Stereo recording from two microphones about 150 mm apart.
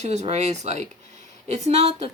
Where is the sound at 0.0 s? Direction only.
50° right (ahead or behind).